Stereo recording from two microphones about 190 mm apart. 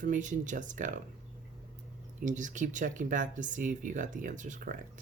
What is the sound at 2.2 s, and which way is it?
Speech, 40° right (ahead or behind).